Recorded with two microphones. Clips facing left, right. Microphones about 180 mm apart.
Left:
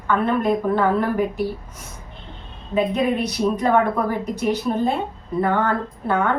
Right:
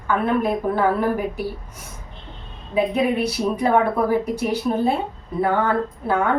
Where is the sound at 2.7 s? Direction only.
10° right (ahead or behind).